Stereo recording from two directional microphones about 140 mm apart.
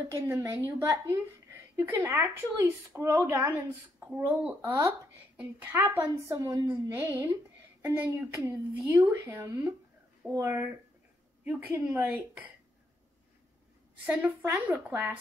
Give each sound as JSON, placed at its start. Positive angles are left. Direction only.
{"t": 0.1, "sound": "a woman's voice", "side_deg": -20}
{"t": 4.0, "sound": "a woman's voice", "side_deg": -10}
{"t": 14.0, "sound": "speech", "side_deg": -10}